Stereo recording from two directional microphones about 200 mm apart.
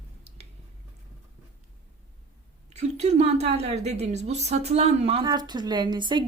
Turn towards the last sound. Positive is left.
turn(degrees=-25)  # may be behind; listen again after turning